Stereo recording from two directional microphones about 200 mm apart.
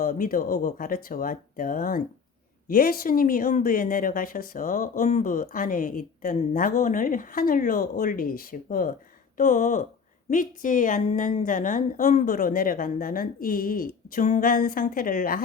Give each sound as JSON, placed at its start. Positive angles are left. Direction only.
{"t": 0.0, "sound": "a woman's voice", "side_deg": 45}